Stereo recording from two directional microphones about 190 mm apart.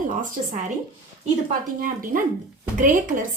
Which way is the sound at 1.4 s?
45° right (ahead or behind).